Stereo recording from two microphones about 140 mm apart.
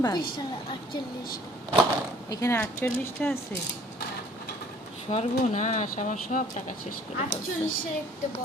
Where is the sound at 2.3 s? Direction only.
25° left (ahead or behind).